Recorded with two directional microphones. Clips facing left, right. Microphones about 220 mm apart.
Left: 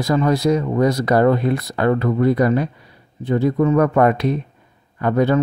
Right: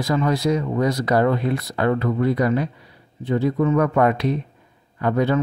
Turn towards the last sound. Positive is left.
turn(degrees=45)  # may be behind; listen again after turning